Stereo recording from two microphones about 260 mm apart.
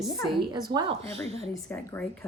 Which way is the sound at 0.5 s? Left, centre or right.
Centre.